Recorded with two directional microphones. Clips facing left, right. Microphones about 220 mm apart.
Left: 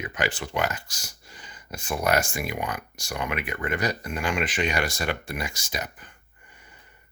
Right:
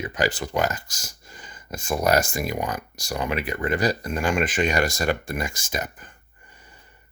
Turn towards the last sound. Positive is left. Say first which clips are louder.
# right 3 dB
turn(degrees=-50)  # may be behind; listen again after turning